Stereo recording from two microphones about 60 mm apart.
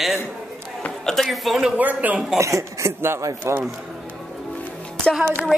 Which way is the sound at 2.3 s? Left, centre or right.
Right.